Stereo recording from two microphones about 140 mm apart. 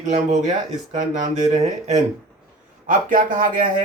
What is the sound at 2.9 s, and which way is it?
Speech, 70° right (ahead or behind).